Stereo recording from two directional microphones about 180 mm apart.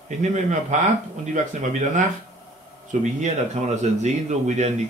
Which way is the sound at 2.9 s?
45° right (ahead or behind).